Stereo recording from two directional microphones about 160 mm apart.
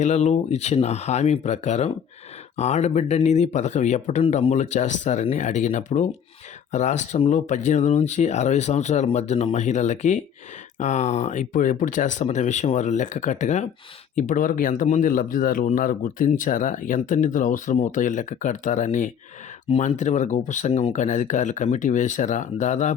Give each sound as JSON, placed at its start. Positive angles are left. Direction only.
{"t": 0.0, "sound": "speech", "side_deg": 45}